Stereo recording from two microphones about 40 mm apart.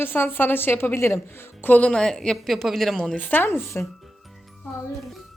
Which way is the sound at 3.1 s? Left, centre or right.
Left.